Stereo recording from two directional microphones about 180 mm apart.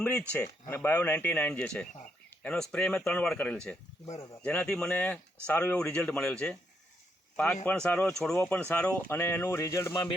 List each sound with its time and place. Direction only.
0.0 s speech: 5° left (ahead or behind)